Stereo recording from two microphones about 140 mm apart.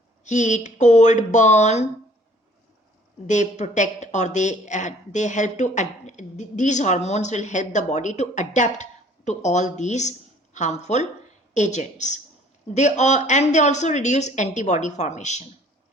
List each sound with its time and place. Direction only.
0.3 s speech: 60° left (ahead or behind)
3.2 s speech: 60° left (ahead or behind)